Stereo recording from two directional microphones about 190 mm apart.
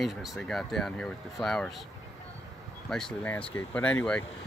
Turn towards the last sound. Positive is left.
turn(degrees=10)  # may be behind; listen again after turning